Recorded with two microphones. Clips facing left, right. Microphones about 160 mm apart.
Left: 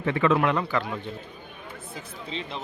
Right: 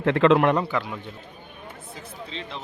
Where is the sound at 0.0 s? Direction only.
75° right (ahead or behind).